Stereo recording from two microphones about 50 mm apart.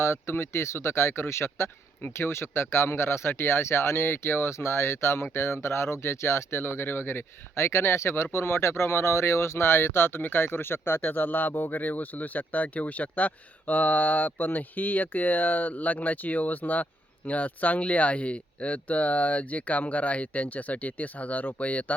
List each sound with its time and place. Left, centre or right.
0.0 s speech: left
10.2 s speech: left